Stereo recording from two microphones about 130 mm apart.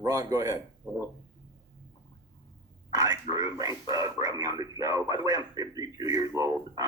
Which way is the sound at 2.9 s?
25° right (ahead or behind).